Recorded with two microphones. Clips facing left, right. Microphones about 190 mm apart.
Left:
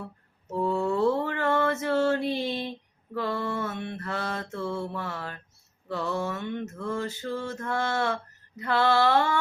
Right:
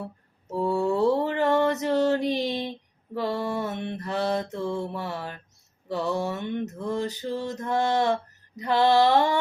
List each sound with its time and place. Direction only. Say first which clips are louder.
0.5 s mantra: right 2 dB; 15° right (ahead or behind)